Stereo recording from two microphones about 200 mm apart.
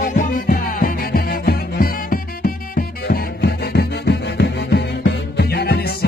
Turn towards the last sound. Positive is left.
turn(degrees=50)  # may be behind; listen again after turning